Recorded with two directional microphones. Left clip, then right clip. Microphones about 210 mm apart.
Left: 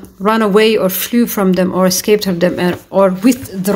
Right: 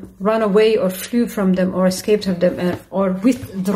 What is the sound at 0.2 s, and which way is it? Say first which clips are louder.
Speech: left 4 dB; 45° left (ahead or behind).